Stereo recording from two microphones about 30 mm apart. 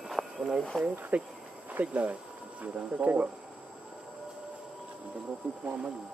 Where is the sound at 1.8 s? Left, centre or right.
Right.